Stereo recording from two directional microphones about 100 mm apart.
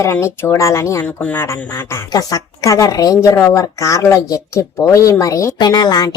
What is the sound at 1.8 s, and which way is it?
Speech, 25° left (ahead or behind).